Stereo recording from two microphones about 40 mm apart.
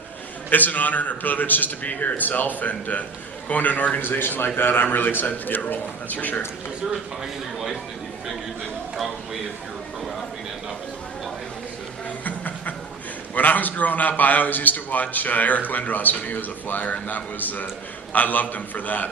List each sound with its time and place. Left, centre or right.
0.5 s a man's voice: left
4.0 s a man's voice: left
12.2 s a sound: left
13.3 s a man's voice: left